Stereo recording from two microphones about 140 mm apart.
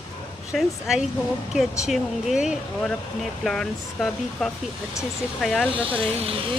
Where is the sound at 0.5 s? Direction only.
5° right (ahead or behind).